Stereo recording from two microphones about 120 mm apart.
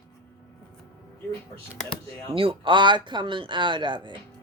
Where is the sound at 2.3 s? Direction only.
50° right (ahead or behind).